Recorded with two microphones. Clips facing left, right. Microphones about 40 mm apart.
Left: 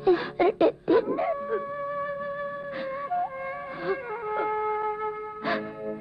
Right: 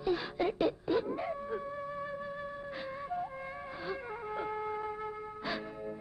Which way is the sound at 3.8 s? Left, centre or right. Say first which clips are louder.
Left 10 dB; left.